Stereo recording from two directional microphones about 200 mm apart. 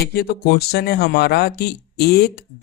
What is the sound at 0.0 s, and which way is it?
Speech, 55° left (ahead or behind).